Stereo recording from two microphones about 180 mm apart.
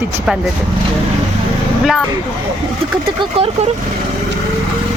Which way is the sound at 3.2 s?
30° right (ahead or behind).